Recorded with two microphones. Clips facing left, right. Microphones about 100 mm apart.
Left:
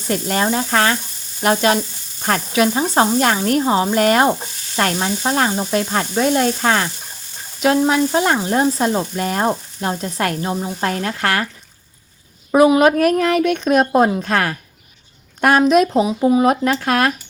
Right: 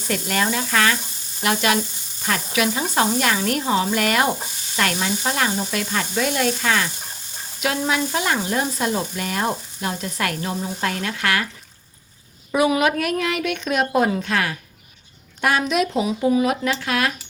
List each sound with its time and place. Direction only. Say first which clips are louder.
0.1 s frying: left 4 dB; 35° left (ahead or behind)
12.6 s frying: left 7 dB; 35° left (ahead or behind)
14.2 s a woman's voice: left 4 dB; 45° left (ahead or behind)
15.4 s frying: left 7 dB; 50° left (ahead or behind)